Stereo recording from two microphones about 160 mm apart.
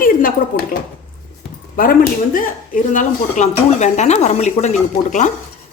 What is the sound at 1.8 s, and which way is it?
Speech, 60° left (ahead or behind).